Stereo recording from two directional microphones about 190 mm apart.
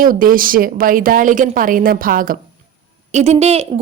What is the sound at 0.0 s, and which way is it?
Speech, 45° right (ahead or behind).